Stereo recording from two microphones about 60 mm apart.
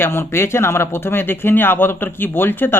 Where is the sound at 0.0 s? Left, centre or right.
Left.